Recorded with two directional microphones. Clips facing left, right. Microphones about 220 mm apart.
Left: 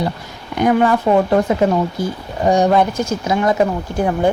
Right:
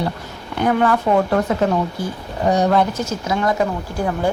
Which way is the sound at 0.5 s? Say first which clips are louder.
Left 3 dB; 15° left (ahead or behind).